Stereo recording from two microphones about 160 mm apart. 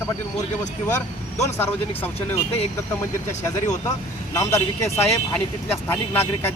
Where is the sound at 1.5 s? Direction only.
15° left (ahead or behind).